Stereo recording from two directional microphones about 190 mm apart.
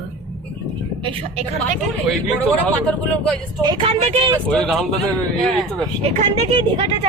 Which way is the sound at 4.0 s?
35° right (ahead or behind).